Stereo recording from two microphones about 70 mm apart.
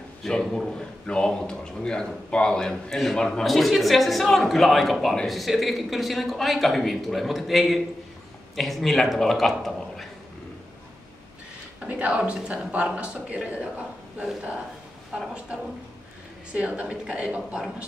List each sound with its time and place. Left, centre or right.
0.2 s a man's voice: centre
11.9 s speech: centre
16.5 s speech: centre